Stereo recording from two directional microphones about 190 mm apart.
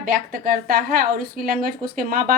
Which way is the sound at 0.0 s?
50° right (ahead or behind).